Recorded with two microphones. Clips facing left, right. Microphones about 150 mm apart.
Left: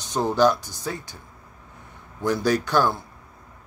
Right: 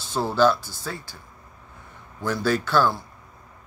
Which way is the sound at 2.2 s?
20° left (ahead or behind).